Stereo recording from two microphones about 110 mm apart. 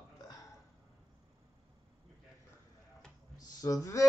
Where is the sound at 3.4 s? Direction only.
35° left (ahead or behind).